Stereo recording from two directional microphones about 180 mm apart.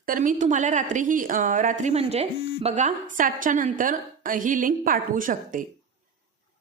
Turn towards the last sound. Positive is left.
turn(degrees=-50)  # may be behind; listen again after turning